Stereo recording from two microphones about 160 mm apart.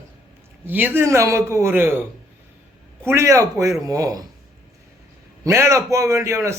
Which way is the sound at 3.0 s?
15° right (ahead or behind).